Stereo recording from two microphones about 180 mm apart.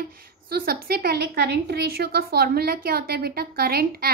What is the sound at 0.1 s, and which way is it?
A child's voice, 55° right (ahead or behind).